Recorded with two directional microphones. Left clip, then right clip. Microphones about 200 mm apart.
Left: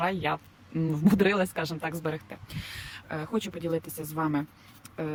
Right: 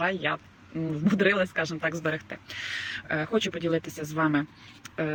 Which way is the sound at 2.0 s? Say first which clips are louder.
Right 4 dB; 10° left (ahead or behind).